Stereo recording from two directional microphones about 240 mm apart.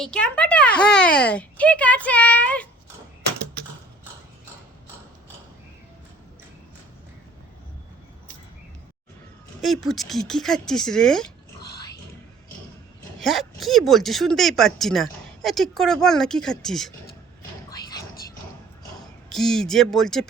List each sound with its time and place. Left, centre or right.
0.0 s speech: centre
9.6 s speech: centre
11.6 s music: left
13.1 s speech: centre
19.3 s speech: centre